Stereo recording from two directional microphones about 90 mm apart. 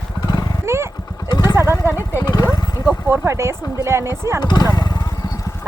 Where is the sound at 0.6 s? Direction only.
30° right (ahead or behind).